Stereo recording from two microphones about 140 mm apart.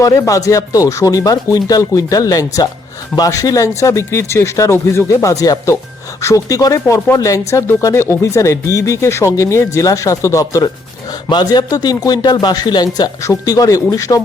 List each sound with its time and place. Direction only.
0.0 s speech: 25° left (ahead or behind)